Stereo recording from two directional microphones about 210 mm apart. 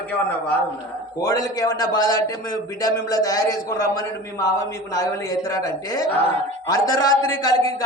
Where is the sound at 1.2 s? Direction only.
15° left (ahead or behind).